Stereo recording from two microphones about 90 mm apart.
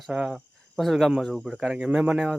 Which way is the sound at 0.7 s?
Centre (ahead or behind).